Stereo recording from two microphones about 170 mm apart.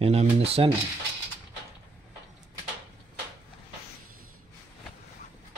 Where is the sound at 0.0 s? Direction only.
35° right (ahead or behind).